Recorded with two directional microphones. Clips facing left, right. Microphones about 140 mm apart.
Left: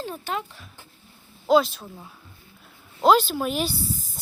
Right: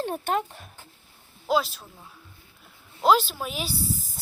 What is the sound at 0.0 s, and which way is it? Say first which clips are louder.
Speech: right 4 dB; 55° right (ahead or behind).